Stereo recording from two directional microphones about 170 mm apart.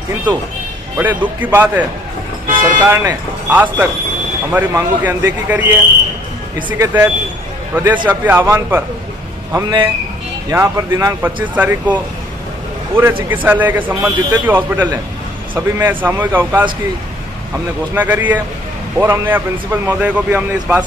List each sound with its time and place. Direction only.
0.9 s a man's voice: 10° right (ahead or behind)
2.4 s vehicle: 55° right (ahead or behind)
2.8 s a man's voice: 15° right (ahead or behind)
11.4 s a man's voice: 10° right (ahead or behind)
13.3 s a man's voice: 10° right (ahead or behind)
17.9 s a man's voice: 10° right (ahead or behind)